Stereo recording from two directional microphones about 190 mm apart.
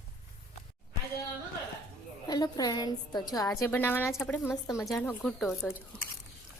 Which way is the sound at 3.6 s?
10° left (ahead or behind).